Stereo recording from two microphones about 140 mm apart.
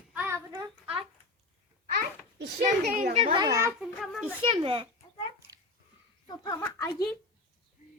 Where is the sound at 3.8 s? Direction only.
Centre (ahead or behind).